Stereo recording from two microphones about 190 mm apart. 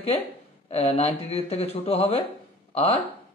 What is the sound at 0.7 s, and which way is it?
A man's voice, 35° left (ahead or behind).